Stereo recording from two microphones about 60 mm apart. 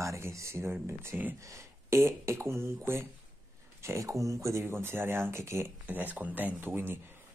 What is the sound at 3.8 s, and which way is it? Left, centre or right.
Speech, right.